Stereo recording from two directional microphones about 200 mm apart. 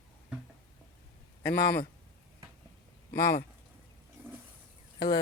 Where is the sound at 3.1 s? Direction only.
15° left (ahead or behind).